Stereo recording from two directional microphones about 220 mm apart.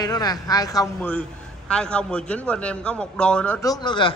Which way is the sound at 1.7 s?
5° left (ahead or behind).